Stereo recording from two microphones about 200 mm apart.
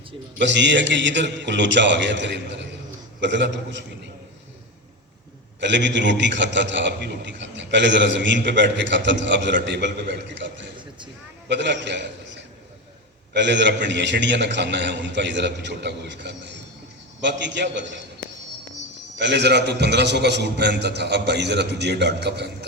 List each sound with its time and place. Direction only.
0.3 s a man's voice: 65° right (ahead or behind)
5.5 s a man's voice: 60° right (ahead or behind)
19.2 s a man's voice: 60° right (ahead or behind)